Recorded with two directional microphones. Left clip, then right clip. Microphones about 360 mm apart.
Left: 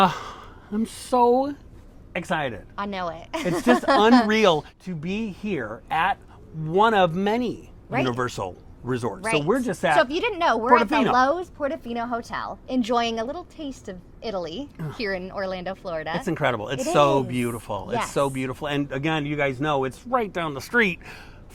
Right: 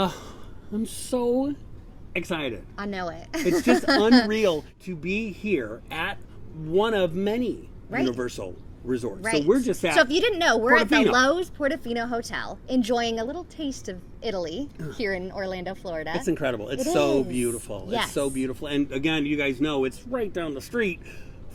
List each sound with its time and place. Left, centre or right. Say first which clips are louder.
0.0 s a woman's voice: left 8 dB; left
2.7 s speech: left 3 dB; centre
4.3 s speech: left 4 dB; left
5.0 s a man's voice: right 2 dB; left
9.4 s speech: right 1 dB; left
9.9 s a woman's voice: right 1 dB; centre
16.2 s speech: left 3 dB; left